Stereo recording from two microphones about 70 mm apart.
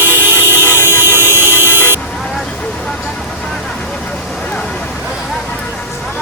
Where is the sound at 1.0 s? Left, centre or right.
Right.